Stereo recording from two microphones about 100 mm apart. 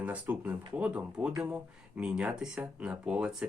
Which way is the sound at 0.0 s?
15° right (ahead or behind).